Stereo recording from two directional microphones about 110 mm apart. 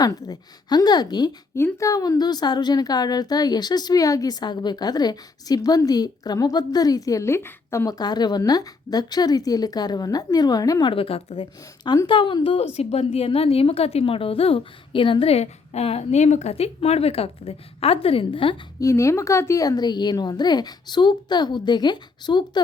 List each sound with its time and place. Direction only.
0.0 s a woman's voice: 35° left (ahead or behind)
1.5 s a woman's voice: 25° left (ahead or behind)
7.9 s a woman's voice: 40° left (ahead or behind)
10.8 s a woman's voice: 55° left (ahead or behind)
11.8 s speech: 40° left (ahead or behind)
12.5 s a woman's voice: 75° left (ahead or behind); by 18.5 s 55° left (ahead or behind)
18.8 s a woman's voice: 30° left (ahead or behind)